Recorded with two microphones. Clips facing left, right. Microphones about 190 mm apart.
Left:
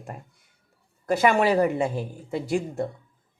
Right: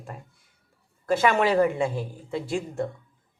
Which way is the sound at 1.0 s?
15° left (ahead or behind).